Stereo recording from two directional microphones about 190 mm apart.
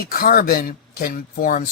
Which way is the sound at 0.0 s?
50° left (ahead or behind).